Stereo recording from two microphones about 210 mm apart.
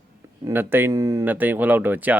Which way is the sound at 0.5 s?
10° right (ahead or behind).